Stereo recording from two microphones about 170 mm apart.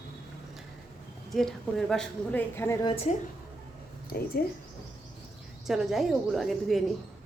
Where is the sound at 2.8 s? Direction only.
35° left (ahead or behind).